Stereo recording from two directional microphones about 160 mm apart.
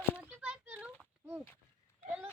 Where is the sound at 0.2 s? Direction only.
10° right (ahead or behind).